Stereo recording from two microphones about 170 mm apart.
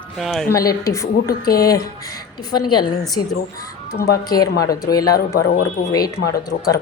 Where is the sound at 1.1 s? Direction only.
65° left (ahead or behind).